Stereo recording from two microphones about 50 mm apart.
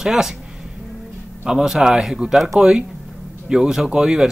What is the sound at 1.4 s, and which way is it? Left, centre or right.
Speech, centre.